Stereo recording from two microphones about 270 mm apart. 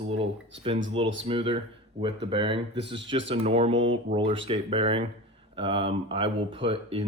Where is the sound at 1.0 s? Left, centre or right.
Centre.